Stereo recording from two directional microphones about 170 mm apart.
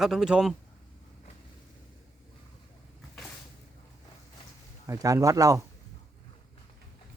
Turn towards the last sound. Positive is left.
turn(degrees=-20)  # may be behind; listen again after turning